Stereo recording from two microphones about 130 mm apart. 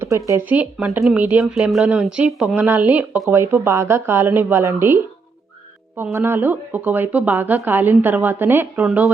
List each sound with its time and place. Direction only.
0.3 s speech: 15° right (ahead or behind)
6.0 s speech: 20° right (ahead or behind)